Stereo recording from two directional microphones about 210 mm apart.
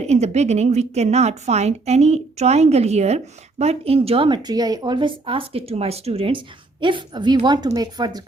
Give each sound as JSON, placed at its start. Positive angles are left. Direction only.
{"t": 0.1, "sound": "a woman's voice", "side_deg": -30}